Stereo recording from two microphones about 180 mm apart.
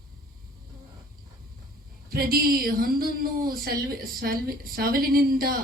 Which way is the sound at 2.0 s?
55° right (ahead or behind).